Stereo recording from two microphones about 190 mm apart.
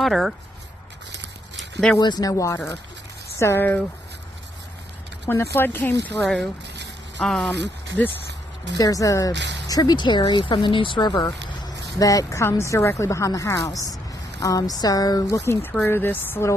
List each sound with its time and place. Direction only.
0.0 s speech: centre (ahead or behind)
1.6 s a sound: centre (ahead or behind)
2.0 s speech: 20° left (ahead or behind)
5.2 s speech: 15° left (ahead or behind)
7.5 s speech: 65° right (ahead or behind)
8.7 s speech: 20° left (ahead or behind)
9.3 s speech: 65° right (ahead or behind)
9.7 s speech: 20° left (ahead or behind)